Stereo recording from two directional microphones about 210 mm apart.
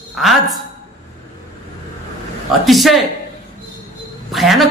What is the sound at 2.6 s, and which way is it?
Speech, centre (ahead or behind).